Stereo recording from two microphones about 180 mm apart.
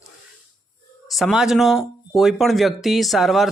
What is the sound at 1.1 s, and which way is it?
Speech, centre (ahead or behind).